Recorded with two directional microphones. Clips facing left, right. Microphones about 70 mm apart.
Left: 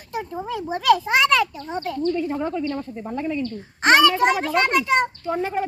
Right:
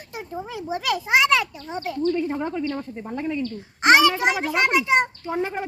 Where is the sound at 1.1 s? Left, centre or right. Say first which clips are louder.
Left 1 dB; centre.